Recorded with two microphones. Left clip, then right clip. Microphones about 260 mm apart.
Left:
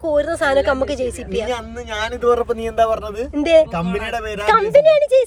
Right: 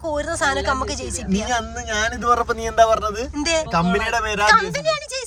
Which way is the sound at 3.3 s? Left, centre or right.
Centre.